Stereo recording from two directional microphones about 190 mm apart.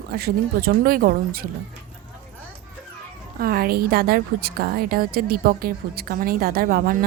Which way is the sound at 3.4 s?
50° right (ahead or behind).